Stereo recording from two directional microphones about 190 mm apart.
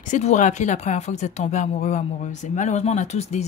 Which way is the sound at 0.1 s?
40° left (ahead or behind).